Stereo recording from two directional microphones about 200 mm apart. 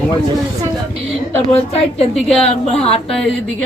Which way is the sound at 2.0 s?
30° left (ahead or behind).